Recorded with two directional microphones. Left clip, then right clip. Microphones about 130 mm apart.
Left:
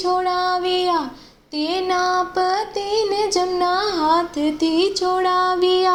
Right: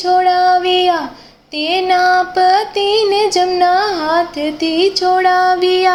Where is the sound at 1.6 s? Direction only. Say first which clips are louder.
Right 7 dB; 25° left (ahead or behind).